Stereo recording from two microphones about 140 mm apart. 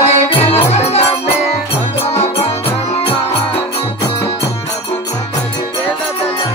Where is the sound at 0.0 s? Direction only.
50° left (ahead or behind).